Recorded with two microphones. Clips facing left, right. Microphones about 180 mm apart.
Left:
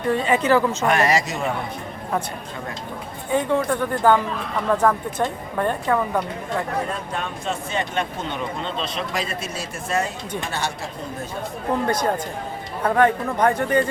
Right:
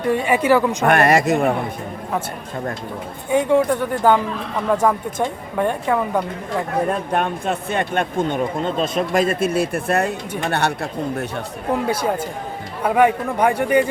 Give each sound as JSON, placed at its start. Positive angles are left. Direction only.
{"t": 0.1, "sound": "a woman's voice", "side_deg": -10}
{"t": 0.9, "sound": "speech", "side_deg": -55}
{"t": 3.2, "sound": "a woman's voice", "side_deg": -10}
{"t": 7.1, "sound": "speech", "side_deg": -60}
{"t": 11.7, "sound": "a woman's voice", "side_deg": -5}